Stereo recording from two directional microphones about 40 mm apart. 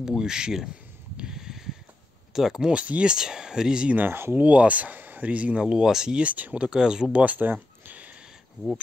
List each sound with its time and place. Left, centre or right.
0.0 s speech: centre
1.3 s a sound: centre
2.3 s speech: centre
2.7 s speech: right
3.1 s speech: centre
4.1 s speech: right
4.4 s speech: right
5.6 s speech: centre
6.1 s speech: right
6.6 s speech: right
7.1 s speech: right
7.3 s a sound: right